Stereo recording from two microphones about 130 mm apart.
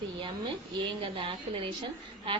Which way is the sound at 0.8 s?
40° right (ahead or behind).